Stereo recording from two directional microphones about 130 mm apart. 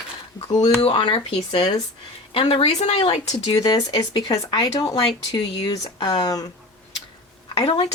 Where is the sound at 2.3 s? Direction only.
50° left (ahead or behind); by 6.5 s 30° left (ahead or behind).